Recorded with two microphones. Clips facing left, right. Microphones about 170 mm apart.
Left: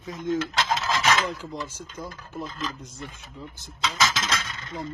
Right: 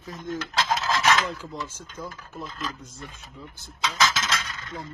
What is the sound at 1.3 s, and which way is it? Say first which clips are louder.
A man's voice: left 1 dB; 10° left (ahead or behind).